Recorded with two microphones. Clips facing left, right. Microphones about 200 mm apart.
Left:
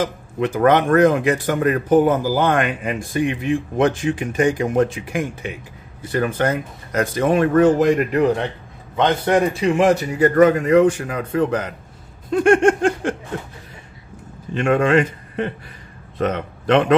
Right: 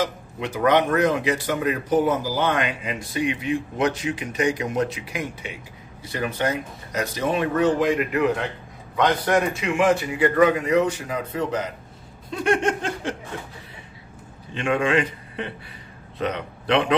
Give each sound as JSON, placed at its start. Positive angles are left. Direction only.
{"t": 0.0, "sound": "speech", "side_deg": 50}
{"t": 8.9, "sound": "a man's voice", "side_deg": 25}
{"t": 14.5, "sound": "a man's voice", "side_deg": 45}